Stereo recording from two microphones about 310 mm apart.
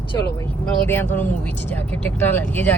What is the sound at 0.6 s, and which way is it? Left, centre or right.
Speech, centre.